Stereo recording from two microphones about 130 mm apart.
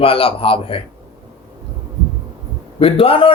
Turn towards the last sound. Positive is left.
turn(degrees=45)  # may be behind; listen again after turning